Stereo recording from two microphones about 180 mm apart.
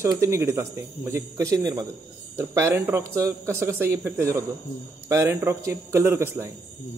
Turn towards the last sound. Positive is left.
turn(degrees=-15)  # may be behind; listen again after turning